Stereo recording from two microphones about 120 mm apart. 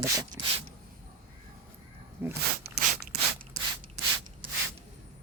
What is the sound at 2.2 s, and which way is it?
Speech, 20° right (ahead or behind).